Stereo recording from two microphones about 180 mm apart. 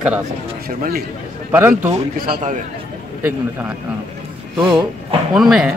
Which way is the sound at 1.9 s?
45° right (ahead or behind).